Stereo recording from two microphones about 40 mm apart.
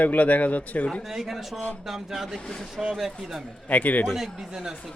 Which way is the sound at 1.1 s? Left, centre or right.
Centre.